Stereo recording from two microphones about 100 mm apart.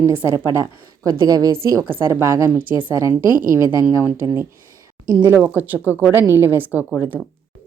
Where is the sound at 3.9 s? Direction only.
25° right (ahead or behind).